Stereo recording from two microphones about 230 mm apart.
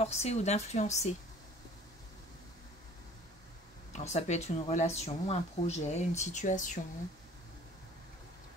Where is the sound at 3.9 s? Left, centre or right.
Left.